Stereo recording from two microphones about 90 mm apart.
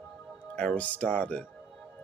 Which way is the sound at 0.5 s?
15° left (ahead or behind).